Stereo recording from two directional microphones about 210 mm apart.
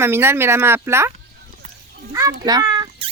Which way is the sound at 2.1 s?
15° right (ahead or behind).